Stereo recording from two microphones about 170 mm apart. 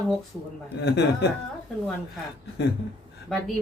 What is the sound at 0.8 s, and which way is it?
Speech, 75° left (ahead or behind).